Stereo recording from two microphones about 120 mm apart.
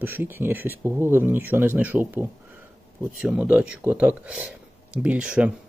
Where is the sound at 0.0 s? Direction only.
15° right (ahead or behind).